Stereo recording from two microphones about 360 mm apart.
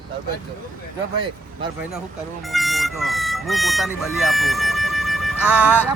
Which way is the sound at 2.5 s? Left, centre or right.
Centre.